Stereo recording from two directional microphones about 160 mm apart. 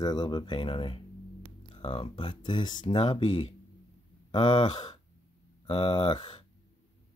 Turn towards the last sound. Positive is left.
turn(degrees=30)  # may be behind; listen again after turning